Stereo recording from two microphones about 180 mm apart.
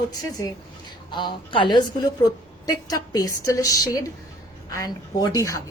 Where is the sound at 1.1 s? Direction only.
25° left (ahead or behind).